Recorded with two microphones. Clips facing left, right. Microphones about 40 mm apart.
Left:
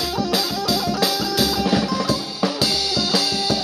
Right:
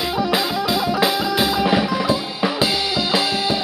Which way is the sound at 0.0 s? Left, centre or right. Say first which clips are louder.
Right 2 dB; right.